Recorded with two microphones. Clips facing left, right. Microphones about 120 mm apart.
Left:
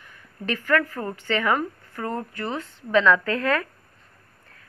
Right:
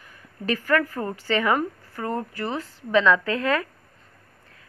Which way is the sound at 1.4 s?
20° right (ahead or behind).